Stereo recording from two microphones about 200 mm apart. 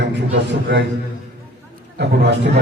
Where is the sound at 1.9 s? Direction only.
60° right (ahead or behind).